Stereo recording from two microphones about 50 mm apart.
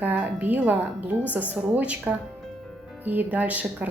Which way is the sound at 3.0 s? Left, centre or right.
Right.